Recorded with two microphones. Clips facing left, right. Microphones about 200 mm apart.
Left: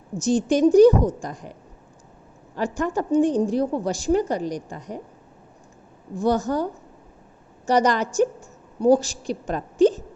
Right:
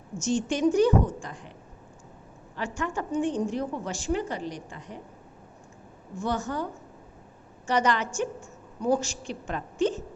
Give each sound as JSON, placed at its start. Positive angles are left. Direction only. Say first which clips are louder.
{"t": 0.2, "sound": "a woman's voice", "louder": "left 7 dB", "side_deg": 35}
{"t": 2.6, "sound": "a woman's voice", "louder": "left 7 dB", "side_deg": 40}
{"t": 6.1, "sound": "a woman's voice", "louder": "left 8 dB", "side_deg": 40}
{"t": 7.7, "sound": "a woman's voice", "louder": "left 5 dB", "side_deg": 40}